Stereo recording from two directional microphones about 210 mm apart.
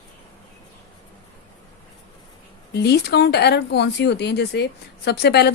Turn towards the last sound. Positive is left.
turn(degrees=50)  # may be behind; listen again after turning